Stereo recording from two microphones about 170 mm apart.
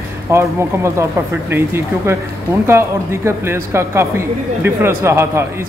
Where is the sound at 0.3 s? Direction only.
15° right (ahead or behind).